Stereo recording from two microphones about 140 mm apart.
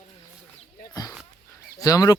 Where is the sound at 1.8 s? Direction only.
25° left (ahead or behind).